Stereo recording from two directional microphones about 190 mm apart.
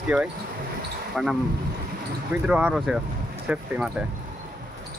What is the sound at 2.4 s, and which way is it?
Speech, 5° right (ahead or behind).